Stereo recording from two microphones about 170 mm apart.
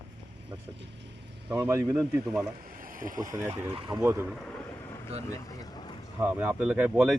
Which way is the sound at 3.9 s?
15° right (ahead or behind).